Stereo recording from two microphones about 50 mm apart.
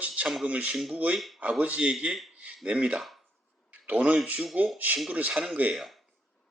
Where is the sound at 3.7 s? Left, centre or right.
Right.